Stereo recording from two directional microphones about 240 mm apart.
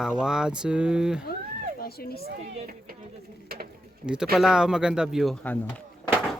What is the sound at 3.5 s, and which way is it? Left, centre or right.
Mechanisms, right.